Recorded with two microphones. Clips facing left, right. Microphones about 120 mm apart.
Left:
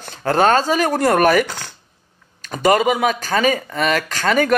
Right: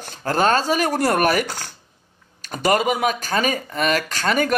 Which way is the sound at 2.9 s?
40° right (ahead or behind).